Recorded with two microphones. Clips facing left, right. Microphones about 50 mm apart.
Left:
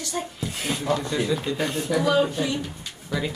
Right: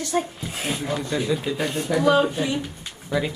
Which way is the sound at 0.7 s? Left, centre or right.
Centre.